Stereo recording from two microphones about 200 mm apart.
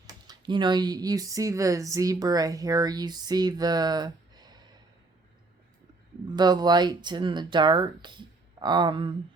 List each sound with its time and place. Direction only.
0.1 s speech: 20° right (ahead or behind)
6.2 s speech: 20° right (ahead or behind)